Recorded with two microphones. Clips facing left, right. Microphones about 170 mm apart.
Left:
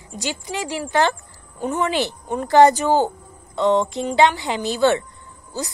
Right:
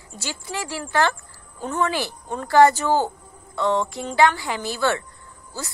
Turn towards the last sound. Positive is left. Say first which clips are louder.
# left 5 dB
turn(degrees=20)  # may be behind; listen again after turning